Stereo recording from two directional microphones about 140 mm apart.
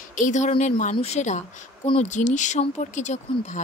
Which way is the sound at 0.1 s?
65° left (ahead or behind).